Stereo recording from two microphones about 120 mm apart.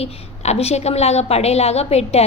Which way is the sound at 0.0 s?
60° left (ahead or behind).